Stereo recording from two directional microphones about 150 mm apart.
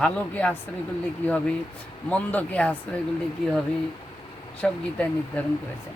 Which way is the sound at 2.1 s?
10° left (ahead or behind).